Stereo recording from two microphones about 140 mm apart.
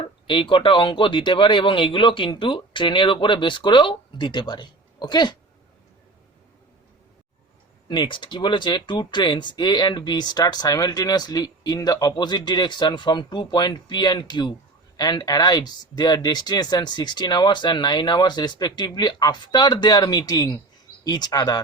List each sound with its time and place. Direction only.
0.3 s speech: 35° left (ahead or behind)
7.9 s speech: 35° left (ahead or behind)